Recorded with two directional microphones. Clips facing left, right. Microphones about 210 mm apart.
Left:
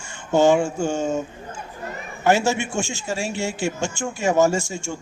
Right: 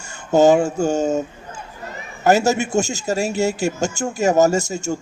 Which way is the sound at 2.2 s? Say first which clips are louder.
Right 3 dB; 40° right (ahead or behind).